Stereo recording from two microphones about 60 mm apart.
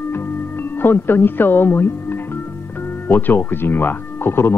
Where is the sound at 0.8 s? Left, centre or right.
Left.